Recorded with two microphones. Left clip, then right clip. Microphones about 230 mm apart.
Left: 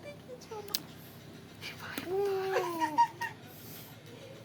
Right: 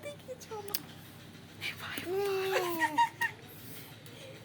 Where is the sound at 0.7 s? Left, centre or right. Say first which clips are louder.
Left 4 dB; centre.